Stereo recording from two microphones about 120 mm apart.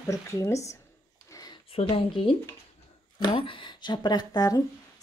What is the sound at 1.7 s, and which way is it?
A woman's voice, 50° left (ahead or behind).